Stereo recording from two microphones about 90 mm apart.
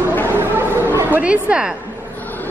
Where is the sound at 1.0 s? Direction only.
15° right (ahead or behind).